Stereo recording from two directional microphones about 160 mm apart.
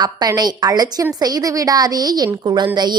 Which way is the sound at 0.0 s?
25° right (ahead or behind).